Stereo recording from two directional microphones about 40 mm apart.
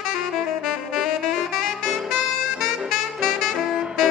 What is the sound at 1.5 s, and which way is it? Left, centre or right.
Saxophone, centre.